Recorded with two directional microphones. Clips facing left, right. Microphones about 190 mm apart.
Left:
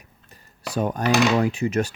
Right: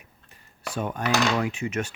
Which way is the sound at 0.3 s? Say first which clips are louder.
Left 2 dB; 40° left (ahead or behind).